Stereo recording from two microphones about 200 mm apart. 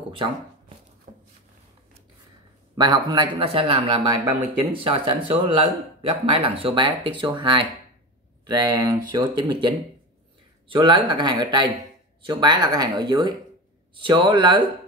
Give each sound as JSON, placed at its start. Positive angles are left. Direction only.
{"t": 0.1, "sound": "shuffling cards", "side_deg": -25}
{"t": 1.1, "sound": "a sound", "side_deg": -40}
{"t": 2.7, "sound": "speech", "side_deg": -20}